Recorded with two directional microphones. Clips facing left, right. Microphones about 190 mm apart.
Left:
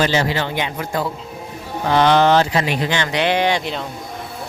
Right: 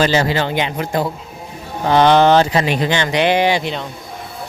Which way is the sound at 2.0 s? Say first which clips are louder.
Right 3 dB; 20° right (ahead or behind).